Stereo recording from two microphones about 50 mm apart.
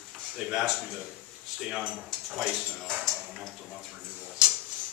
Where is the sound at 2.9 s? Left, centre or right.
Centre.